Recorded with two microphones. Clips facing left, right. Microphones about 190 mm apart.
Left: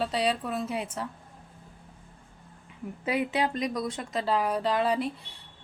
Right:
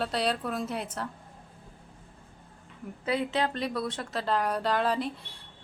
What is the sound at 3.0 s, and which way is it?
A woman's voice, 15° left (ahead or behind).